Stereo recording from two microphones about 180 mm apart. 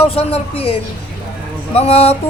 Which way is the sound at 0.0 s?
35° left (ahead or behind).